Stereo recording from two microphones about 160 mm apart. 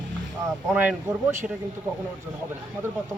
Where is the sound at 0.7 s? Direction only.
15° right (ahead or behind).